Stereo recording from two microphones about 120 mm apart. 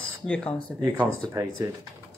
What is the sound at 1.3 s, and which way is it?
Speech, 25° right (ahead or behind).